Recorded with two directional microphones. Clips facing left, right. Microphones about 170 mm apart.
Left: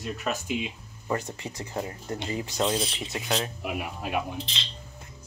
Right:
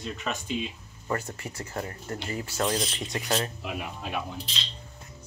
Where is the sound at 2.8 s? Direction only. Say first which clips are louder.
Even; 5° left (ahead or behind).